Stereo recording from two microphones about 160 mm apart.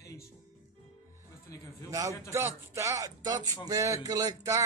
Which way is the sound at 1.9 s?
20° right (ahead or behind).